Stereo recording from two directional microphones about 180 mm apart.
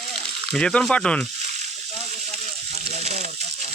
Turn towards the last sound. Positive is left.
turn(degrees=-40)  # may be behind; listen again after turning